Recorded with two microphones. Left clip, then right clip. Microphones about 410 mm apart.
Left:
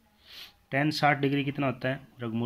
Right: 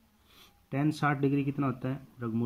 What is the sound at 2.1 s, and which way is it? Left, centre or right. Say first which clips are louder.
Speech: left 1 dB; left.